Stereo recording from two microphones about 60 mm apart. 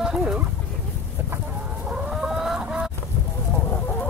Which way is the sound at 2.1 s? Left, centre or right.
Centre.